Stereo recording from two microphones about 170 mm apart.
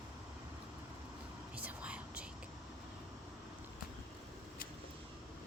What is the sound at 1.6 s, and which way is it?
Whispering, 10° right (ahead or behind).